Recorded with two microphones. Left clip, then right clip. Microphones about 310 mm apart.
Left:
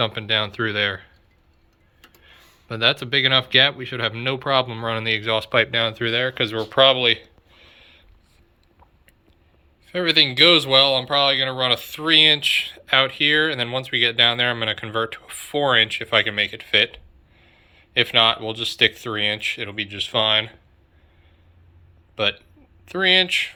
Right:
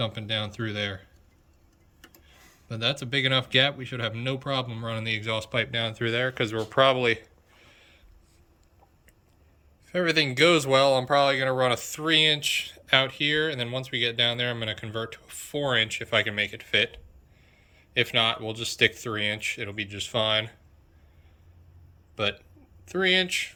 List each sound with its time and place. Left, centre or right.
0.0 s speech: centre
2.2 s speech: centre
9.8 s speech: centre
22.1 s a man's voice: centre